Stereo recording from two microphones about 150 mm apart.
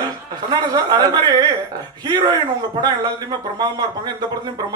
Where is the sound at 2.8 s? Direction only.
30° right (ahead or behind).